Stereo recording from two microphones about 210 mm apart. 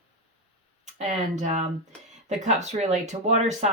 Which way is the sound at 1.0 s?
35° right (ahead or behind).